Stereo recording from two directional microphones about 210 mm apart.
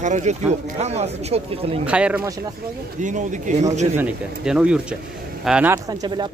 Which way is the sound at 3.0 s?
35° right (ahead or behind).